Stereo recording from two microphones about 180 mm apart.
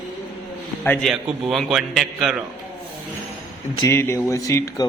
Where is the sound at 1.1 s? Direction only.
Centre (ahead or behind).